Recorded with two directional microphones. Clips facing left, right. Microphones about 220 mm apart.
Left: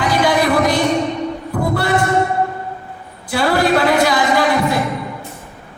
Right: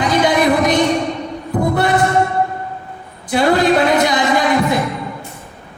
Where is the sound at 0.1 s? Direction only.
20° right (ahead or behind).